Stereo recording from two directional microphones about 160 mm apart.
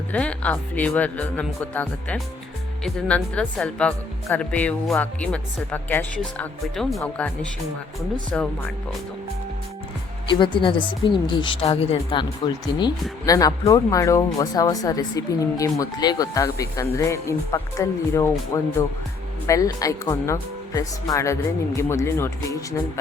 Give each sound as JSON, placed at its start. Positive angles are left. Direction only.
{"t": 0.1, "sound": "speech", "side_deg": 10}
{"t": 8.3, "sound": "speech", "side_deg": 5}
{"t": 10.2, "sound": "a woman's voice", "side_deg": 30}
{"t": 12.8, "sound": "speech", "side_deg": 20}